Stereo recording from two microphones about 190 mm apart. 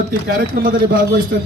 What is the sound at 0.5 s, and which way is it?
Speech, 50° right (ahead or behind).